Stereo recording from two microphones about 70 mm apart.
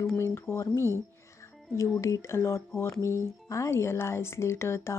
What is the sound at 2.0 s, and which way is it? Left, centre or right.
Speech, left.